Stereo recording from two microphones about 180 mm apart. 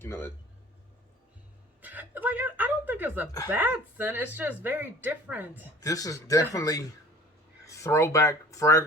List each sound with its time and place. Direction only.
0.0 s speech: 15° left (ahead or behind)
1.8 s a sound: 10° right (ahead or behind)
3.5 s speech: 10° right (ahead or behind)
5.8 s speech: 20° left (ahead or behind)